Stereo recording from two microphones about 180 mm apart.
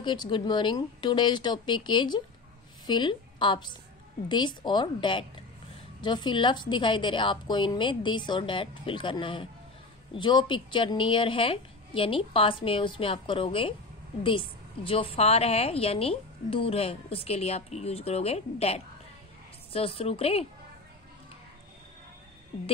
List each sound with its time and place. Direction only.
0.0 s a woman's voice: 25° left (ahead or behind)
14.9 s speech: 30° left (ahead or behind)